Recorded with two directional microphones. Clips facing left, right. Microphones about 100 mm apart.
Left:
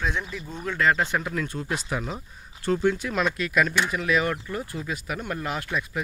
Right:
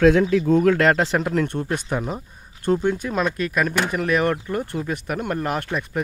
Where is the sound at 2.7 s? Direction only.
20° right (ahead or behind).